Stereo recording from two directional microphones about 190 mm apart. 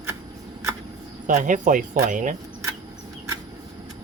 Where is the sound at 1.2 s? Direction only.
45° right (ahead or behind).